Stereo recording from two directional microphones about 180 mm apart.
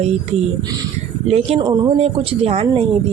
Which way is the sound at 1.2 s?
35° right (ahead or behind).